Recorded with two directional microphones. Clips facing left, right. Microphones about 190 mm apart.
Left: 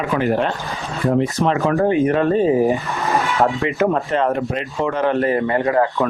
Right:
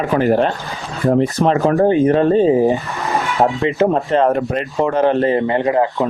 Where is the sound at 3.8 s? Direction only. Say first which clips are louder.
Right 4 dB; 35° right (ahead or behind); by 6.0 s 20° right (ahead or behind).